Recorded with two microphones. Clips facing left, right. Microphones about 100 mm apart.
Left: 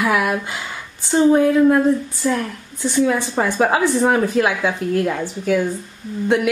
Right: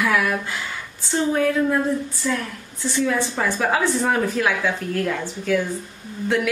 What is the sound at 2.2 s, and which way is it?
Speech, 40° left (ahead or behind).